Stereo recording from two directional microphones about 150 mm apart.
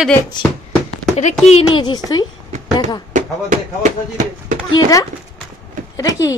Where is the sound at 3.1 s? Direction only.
55° right (ahead or behind).